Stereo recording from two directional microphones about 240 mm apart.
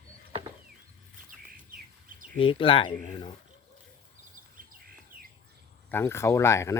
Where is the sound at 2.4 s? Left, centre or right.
Left.